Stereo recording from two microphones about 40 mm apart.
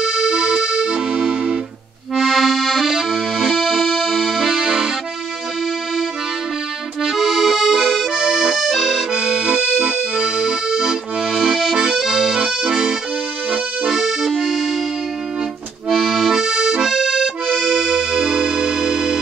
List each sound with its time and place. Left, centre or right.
0.0 s music: right
2.1 s accordion: centre
7.0 s accordion: centre
11.5 s accordion: centre
14.3 s music: centre
15.9 s accordion: centre